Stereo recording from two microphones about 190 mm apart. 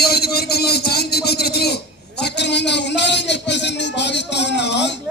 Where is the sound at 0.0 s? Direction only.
55° left (ahead or behind).